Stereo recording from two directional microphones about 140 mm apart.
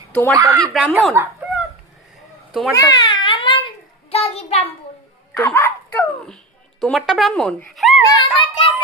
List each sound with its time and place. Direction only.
0.1 s speech: 10° left (ahead or behind)
0.3 s speech: 20° right (ahead or behind)
0.7 s speech: centre (ahead or behind)
2.5 s a child's voice: 5° right (ahead or behind)
2.7 s babbling: 25° left (ahead or behind)
4.1 s a sound: 45° left (ahead or behind)
5.4 s a child's voice: 15° left (ahead or behind)
6.2 s speech: 5° left (ahead or behind)
8.0 s a sound: 35° left (ahead or behind)